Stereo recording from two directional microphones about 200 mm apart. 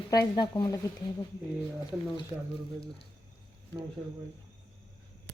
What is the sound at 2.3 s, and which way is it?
Speech, 5° right (ahead or behind).